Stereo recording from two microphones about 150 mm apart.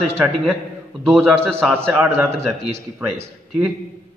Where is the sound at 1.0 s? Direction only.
Centre (ahead or behind).